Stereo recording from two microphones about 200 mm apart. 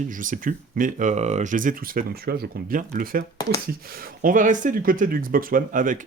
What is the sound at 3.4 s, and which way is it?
Speech, 20° left (ahead or behind).